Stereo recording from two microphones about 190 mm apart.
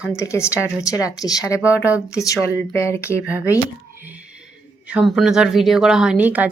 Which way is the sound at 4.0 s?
5° right (ahead or behind).